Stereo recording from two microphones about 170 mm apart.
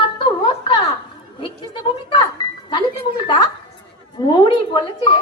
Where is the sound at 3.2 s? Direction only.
30° left (ahead or behind).